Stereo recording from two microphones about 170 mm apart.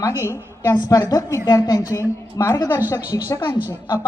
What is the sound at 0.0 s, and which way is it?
A woman's voice, 15° left (ahead or behind).